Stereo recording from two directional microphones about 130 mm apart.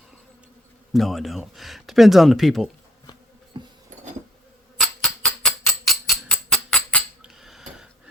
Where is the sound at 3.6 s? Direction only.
35° right (ahead or behind).